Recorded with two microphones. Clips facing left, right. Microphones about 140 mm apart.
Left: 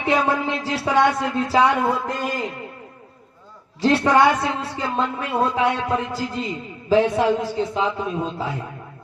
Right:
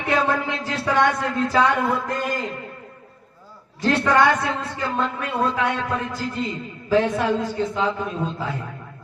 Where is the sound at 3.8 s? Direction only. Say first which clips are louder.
Left 2 dB; 15° left (ahead or behind).